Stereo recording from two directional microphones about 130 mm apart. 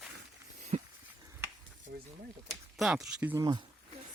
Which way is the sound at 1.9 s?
80° right.